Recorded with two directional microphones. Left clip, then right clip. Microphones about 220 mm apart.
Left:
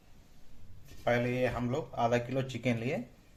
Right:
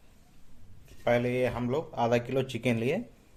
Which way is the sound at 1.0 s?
45° right (ahead or behind).